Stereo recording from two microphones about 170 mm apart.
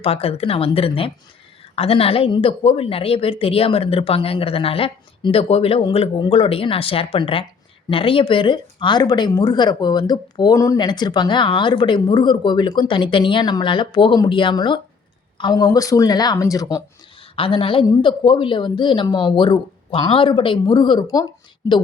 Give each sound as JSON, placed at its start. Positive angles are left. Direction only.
{"t": 0.0, "sound": "a woman's voice", "side_deg": 35}
{"t": 17.3, "sound": "speech", "side_deg": 30}